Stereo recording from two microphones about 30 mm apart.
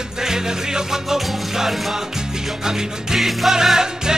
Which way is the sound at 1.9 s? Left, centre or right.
Centre.